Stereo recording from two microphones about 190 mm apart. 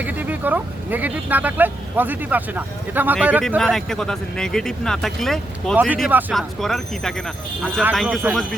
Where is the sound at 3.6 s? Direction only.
Centre (ahead or behind).